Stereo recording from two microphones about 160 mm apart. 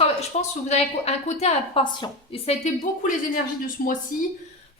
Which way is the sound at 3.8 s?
65° left (ahead or behind).